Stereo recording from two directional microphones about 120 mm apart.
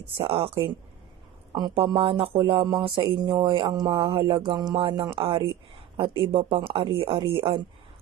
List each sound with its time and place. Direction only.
0.2 s speech: 50° right (ahead or behind)
1.7 s speech: 45° right (ahead or behind)
2.4 s speech: 40° right (ahead or behind)
3.9 s speech: 50° right (ahead or behind)